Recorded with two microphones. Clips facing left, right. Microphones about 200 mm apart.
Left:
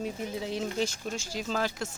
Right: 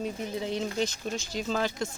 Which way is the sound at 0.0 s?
5° left (ahead or behind).